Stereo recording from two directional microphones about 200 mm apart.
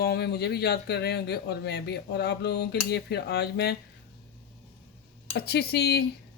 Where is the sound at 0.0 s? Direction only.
55° left (ahead or behind).